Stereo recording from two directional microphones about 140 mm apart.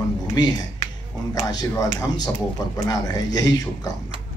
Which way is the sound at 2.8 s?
30° left (ahead or behind).